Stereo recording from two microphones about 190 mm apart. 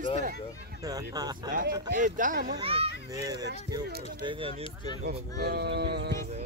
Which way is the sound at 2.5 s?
30° right (ahead or behind).